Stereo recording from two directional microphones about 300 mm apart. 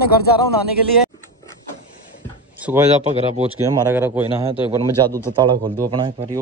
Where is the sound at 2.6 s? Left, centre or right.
Centre.